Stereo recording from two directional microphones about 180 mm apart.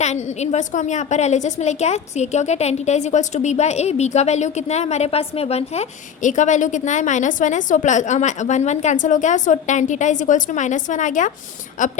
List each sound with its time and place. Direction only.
0.0 s a woman's voice: 40° left (ahead or behind)